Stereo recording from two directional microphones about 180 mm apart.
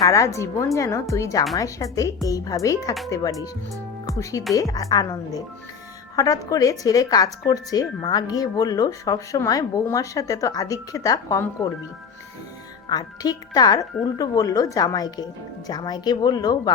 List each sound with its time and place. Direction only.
0.0 s speech: 15° left (ahead or behind)
12.9 s speech: 20° left (ahead or behind)